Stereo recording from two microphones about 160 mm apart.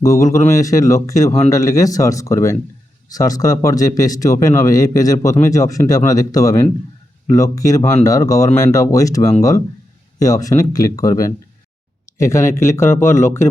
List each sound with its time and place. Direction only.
0.0 s speech: 20° left (ahead or behind)
12.1 s speech: 15° left (ahead or behind)